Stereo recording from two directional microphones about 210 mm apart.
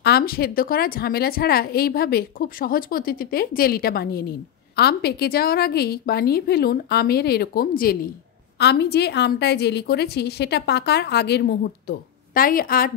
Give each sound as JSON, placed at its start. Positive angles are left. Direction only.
{"t": 0.0, "sound": "a woman's voice", "side_deg": 45}